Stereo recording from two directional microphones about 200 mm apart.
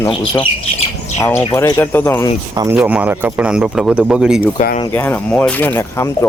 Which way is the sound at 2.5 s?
15° right (ahead or behind).